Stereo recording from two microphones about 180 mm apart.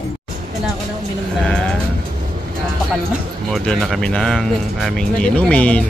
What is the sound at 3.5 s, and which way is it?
Speech, centre (ahead or behind).